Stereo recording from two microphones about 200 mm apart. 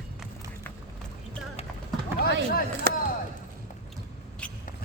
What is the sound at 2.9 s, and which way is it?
Chop, 55° right (ahead or behind).